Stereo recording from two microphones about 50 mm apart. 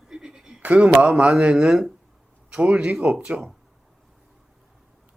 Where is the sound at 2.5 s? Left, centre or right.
Right.